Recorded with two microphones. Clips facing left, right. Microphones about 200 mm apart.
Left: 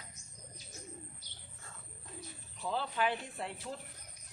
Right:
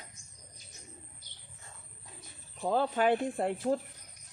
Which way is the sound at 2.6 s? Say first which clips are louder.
Right 7 dB; 50° right (ahead or behind).